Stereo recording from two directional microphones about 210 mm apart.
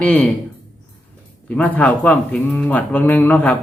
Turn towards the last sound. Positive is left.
turn(degrees=5)  # may be behind; listen again after turning